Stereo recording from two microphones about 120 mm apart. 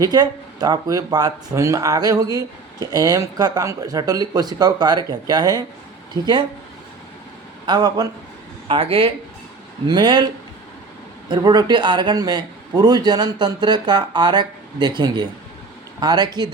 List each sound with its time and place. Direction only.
0.0 s a man's voice: 35° right (ahead or behind)
7.7 s a man's voice: 35° right (ahead or behind)
8.6 s speech: 50° right (ahead or behind)
9.8 s a man's voice: 40° right (ahead or behind)
11.3 s a man's voice: 35° right (ahead or behind)